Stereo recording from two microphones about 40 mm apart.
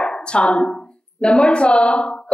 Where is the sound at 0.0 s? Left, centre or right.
Left.